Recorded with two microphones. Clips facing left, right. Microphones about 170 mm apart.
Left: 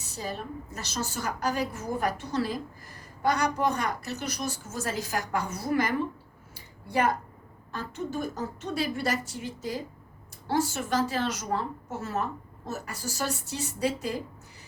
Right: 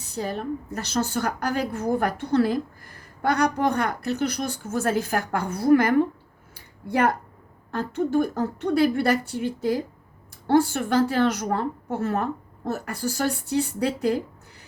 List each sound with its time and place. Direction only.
0.1 s a woman's voice: 60° right (ahead or behind)
6.5 s a sound: 60° right (ahead or behind)
7.7 s a woman's voice: 55° right (ahead or behind)